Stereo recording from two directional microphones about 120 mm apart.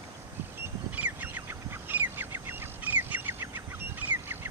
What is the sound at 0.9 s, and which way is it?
Bird, 15° right (ahead or behind).